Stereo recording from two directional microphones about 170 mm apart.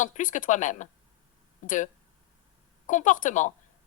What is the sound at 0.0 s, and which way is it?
Speech, 50° left (ahead or behind).